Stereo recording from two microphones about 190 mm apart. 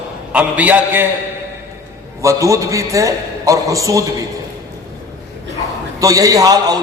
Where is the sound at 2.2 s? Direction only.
15° right (ahead or behind).